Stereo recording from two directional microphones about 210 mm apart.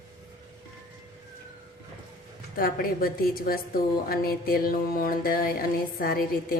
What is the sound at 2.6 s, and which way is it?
A woman's voice, 45° left (ahead or behind).